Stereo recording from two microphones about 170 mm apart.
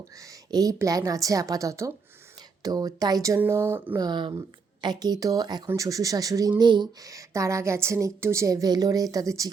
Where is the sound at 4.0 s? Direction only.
25° right (ahead or behind).